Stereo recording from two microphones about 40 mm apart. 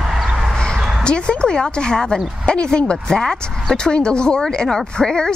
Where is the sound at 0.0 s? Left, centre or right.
Centre.